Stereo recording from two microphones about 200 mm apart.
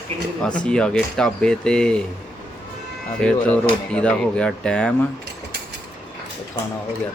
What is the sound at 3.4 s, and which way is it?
Speech, 5° left (ahead or behind).